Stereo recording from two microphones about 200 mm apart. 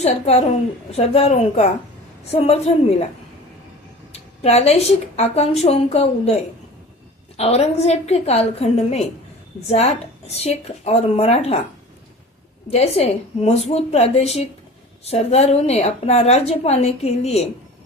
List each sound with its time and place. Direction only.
0.0 s a woman's voice: 30° left (ahead or behind)
4.1 s a woman's voice: 30° left (ahead or behind)
12.7 s a woman's voice: 30° left (ahead or behind)